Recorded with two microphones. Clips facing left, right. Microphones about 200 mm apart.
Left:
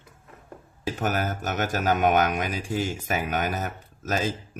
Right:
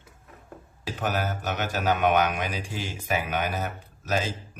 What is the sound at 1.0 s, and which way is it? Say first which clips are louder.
Speech: left 1 dB; 45° left (ahead or behind).